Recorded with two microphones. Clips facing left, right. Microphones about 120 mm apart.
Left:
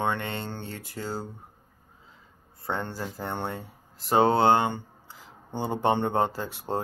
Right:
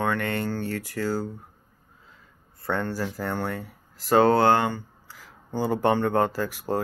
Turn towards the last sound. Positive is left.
turn(degrees=25)  # may be behind; listen again after turning